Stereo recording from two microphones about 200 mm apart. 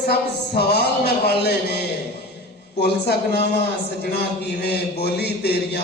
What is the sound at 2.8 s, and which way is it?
Speech, 55° left (ahead or behind).